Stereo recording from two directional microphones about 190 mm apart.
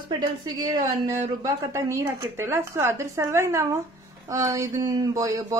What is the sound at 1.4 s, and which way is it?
Speech, 15° right (ahead or behind).